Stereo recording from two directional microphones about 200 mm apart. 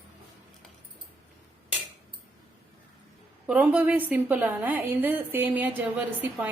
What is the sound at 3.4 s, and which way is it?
A woman's voice, 5° right (ahead or behind).